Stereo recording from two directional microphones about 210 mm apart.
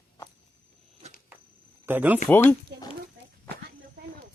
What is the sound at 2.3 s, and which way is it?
Speech, 10° left (ahead or behind).